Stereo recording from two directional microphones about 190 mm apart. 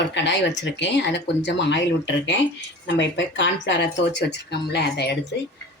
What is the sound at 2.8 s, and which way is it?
Speech, 70° left (ahead or behind).